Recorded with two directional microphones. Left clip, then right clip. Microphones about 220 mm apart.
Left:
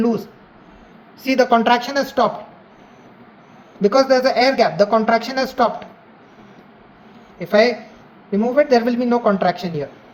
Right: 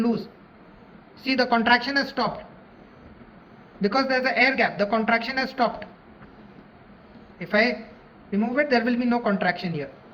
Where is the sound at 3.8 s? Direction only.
45° left (ahead or behind).